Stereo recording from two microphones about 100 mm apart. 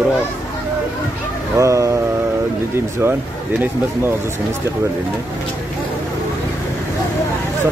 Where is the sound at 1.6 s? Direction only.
30° right (ahead or behind).